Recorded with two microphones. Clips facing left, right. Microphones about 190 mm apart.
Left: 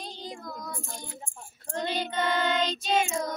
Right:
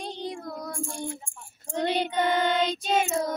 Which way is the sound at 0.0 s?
65° right (ahead or behind).